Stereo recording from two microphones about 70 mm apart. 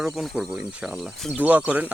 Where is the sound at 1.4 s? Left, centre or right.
Right.